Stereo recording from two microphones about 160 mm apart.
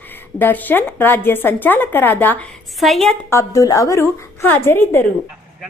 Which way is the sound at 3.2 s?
20° left (ahead or behind).